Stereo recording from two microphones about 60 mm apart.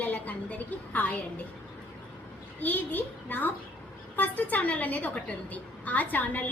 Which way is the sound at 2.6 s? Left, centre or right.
Left.